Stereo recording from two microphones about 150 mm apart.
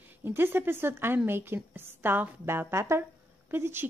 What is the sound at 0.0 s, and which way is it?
A woman's voice, 15° right (ahead or behind).